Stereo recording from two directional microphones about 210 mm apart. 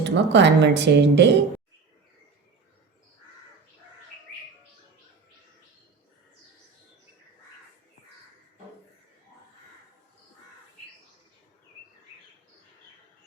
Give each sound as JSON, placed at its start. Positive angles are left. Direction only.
{"t": 0.0, "sound": "speech", "side_deg": -55}